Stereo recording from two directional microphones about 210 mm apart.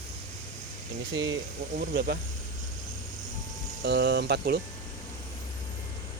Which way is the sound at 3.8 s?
55° right (ahead or behind).